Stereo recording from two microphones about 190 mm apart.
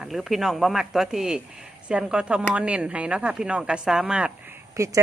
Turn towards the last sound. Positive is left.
turn(degrees=-15)  # may be behind; listen again after turning